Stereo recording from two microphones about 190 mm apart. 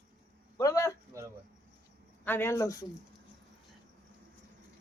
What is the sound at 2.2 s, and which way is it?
Speech, 10° left (ahead or behind).